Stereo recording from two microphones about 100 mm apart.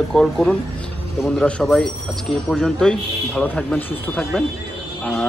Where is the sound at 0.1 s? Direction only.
5° left (ahead or behind).